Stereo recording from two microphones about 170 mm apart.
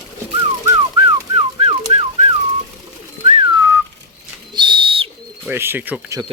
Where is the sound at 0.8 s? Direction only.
30° right (ahead or behind).